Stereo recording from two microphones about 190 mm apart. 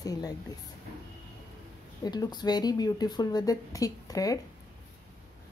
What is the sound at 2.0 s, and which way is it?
Speech, 20° left (ahead or behind).